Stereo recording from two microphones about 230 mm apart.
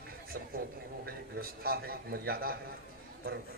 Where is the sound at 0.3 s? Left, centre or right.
Right.